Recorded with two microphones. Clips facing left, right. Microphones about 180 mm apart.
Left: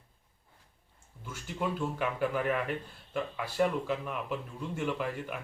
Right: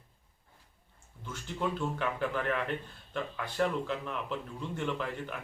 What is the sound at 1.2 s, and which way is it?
Speech, 10° left (ahead or behind).